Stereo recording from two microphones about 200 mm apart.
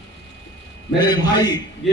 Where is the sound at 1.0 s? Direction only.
20° left (ahead or behind).